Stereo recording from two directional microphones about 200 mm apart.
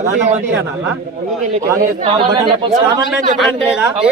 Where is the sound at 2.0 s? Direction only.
25° right (ahead or behind).